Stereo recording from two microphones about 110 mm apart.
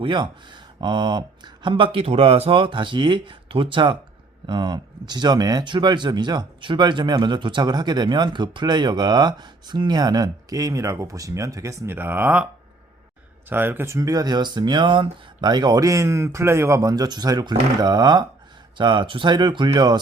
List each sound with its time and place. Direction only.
0.0 s speech: 45° right (ahead or behind); by 12.5 s 15° right (ahead or behind)
13.5 s speech: 20° right (ahead or behind); by 20.0 s 40° right (ahead or behind)